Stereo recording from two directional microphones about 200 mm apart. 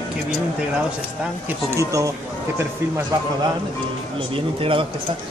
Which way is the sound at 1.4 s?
15° right (ahead or behind).